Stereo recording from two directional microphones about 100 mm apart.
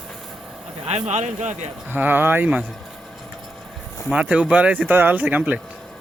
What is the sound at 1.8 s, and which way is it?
Speech, 20° right (ahead or behind).